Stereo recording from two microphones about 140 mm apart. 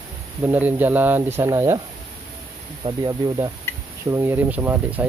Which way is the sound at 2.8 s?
30° right (ahead or behind).